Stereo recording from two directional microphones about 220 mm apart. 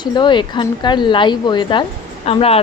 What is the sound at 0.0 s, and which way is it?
A woman's voice, 20° left (ahead or behind).